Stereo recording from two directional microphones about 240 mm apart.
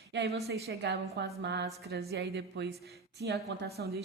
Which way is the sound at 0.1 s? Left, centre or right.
Right.